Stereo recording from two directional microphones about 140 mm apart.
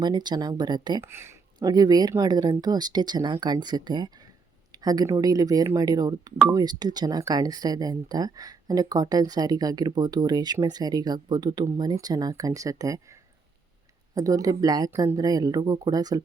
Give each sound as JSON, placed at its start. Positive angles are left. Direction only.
{"t": 0.0, "sound": "speech", "side_deg": -30}
{"t": 1.0, "sound": "speech", "side_deg": -20}
{"t": 1.5, "sound": "speech", "side_deg": -30}
{"t": 14.2, "sound": "speech", "side_deg": -25}